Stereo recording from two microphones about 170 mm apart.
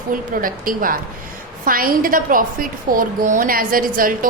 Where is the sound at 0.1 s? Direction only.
55° right (ahead or behind).